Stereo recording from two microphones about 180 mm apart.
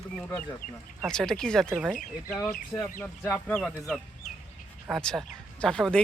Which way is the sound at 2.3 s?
5° left (ahead or behind).